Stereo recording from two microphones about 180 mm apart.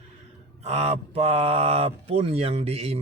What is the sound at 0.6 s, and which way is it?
Speech, 35° right (ahead or behind).